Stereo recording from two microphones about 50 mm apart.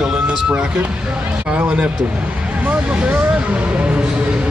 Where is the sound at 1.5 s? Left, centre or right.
Right.